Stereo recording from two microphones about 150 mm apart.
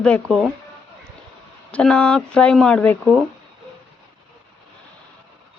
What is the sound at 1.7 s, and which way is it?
Speech, 5° left (ahead or behind).